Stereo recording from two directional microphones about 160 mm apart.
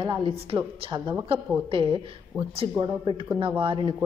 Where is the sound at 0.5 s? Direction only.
35° right (ahead or behind).